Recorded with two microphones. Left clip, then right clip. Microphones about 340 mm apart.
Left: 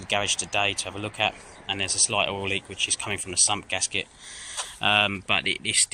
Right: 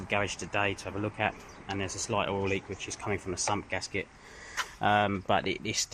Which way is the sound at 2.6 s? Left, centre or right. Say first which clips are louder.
Left 9 dB; left.